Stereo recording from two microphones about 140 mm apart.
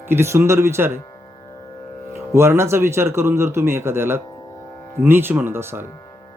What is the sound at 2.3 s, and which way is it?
Speech, 20° right (ahead or behind).